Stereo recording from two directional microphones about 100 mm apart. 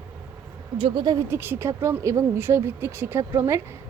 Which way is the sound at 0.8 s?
45° right (ahead or behind).